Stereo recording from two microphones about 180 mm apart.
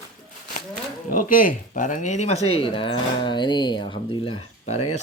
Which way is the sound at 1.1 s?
50° left (ahead or behind).